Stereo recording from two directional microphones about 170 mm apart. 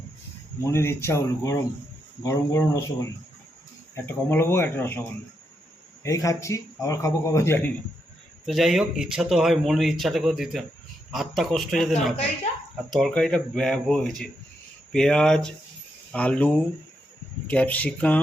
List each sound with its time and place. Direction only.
0.6 s a man's voice: 15° left (ahead or behind)
3.9 s a man's voice: 15° left (ahead or behind)
8.4 s a man's voice: centre (ahead or behind)